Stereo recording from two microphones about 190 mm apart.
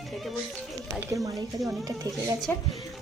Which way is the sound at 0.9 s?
10° right (ahead or behind).